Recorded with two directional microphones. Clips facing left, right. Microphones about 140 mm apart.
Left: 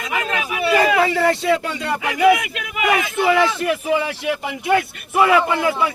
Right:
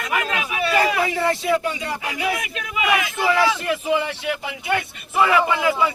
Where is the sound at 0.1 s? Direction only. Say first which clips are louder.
Left 1 dB; 25° left (ahead or behind).